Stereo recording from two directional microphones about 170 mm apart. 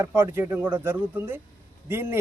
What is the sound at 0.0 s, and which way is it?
A man's voice, 15° right (ahead or behind).